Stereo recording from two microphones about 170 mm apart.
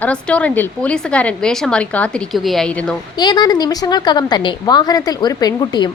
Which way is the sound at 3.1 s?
25° left (ahead or behind).